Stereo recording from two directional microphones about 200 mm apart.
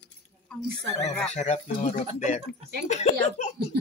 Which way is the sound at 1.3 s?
35° left (ahead or behind).